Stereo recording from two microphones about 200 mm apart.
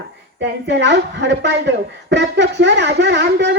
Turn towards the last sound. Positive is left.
turn(degrees=-60)  # may be behind; listen again after turning